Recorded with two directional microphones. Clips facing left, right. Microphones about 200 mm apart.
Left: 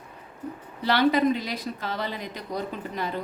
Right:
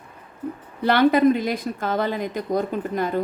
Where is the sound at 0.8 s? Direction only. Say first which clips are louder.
Right 5 dB; 50° right (ahead or behind).